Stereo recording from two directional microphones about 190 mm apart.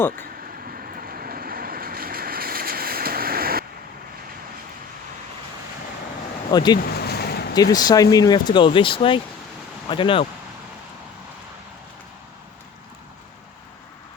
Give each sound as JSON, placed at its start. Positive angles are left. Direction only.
{"t": 0.7, "sound": "vehicle", "side_deg": -50}
{"t": 6.5, "sound": "speech", "side_deg": 20}
{"t": 6.9, "sound": "a sound", "side_deg": 55}
{"t": 7.5, "sound": "speech", "side_deg": 20}